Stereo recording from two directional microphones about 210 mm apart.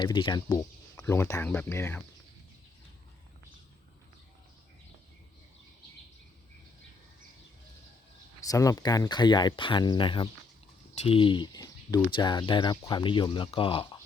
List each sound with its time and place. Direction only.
0.0 s speech: 20° left (ahead or behind)
8.4 s speech: 15° left (ahead or behind)